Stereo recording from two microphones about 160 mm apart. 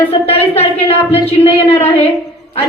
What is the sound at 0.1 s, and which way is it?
A woman's voice, 40° left (ahead or behind).